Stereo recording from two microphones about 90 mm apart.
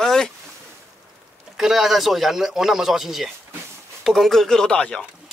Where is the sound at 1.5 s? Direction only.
5° right (ahead or behind).